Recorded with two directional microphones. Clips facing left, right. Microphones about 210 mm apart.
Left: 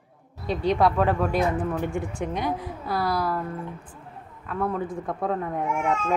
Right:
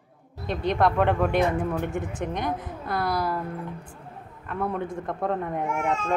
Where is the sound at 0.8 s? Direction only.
Centre (ahead or behind).